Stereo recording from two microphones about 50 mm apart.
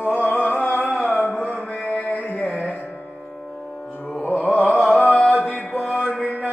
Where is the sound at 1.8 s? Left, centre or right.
Left.